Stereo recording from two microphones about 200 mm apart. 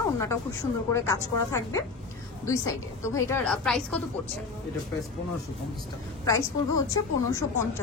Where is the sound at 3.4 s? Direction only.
5° left (ahead or behind).